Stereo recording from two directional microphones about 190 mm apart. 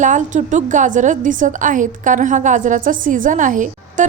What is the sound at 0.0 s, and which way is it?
A woman's voice, 40° right (ahead or behind).